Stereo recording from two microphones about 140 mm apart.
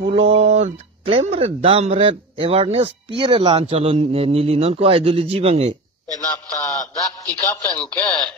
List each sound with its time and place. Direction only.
0.0 s speech: 45° right (ahead or behind)
5.7 s a sound: 25° right (ahead or behind)
7.2 s speech: 10° left (ahead or behind)